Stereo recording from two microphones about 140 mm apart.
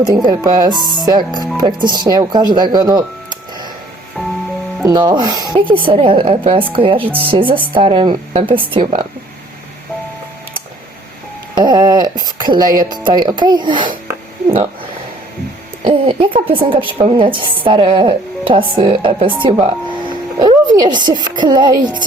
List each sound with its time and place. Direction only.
0.0 s speech: 30° right (ahead or behind)
4.8 s speech: 30° right (ahead or behind)
11.5 s speech: 30° right (ahead or behind)
15.8 s speech: 35° right (ahead or behind)